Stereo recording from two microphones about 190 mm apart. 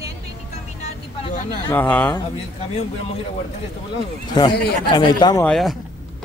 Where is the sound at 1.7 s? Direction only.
10° left (ahead or behind).